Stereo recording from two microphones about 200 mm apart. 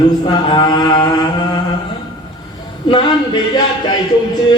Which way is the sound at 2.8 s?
25° left (ahead or behind).